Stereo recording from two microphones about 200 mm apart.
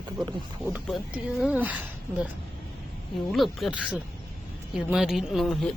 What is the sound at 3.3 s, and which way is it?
Speech, centre (ahead or behind).